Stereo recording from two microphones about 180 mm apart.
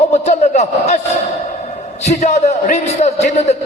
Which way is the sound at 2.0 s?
40° left (ahead or behind).